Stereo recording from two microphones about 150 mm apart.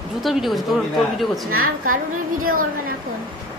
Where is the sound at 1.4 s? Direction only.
75° right (ahead or behind).